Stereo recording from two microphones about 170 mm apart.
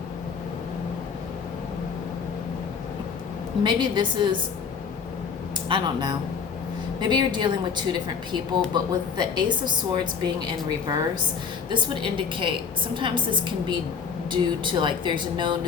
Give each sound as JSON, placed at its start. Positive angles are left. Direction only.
{"t": 3.6, "sound": "a woman's voice", "side_deg": -25}
{"t": 5.6, "sound": "a woman's voice", "side_deg": -25}
{"t": 8.7, "sound": "a woman's voice", "side_deg": -25}